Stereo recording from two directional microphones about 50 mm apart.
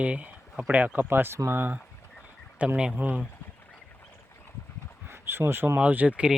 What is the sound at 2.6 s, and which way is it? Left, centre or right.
Speech, right.